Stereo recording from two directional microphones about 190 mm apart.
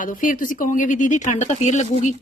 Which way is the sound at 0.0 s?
45° left (ahead or behind).